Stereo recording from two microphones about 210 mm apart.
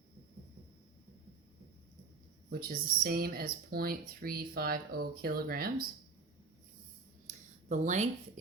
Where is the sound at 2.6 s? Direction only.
45° right (ahead or behind).